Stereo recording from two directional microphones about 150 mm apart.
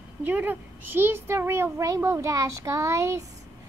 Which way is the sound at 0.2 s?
15° right (ahead or behind).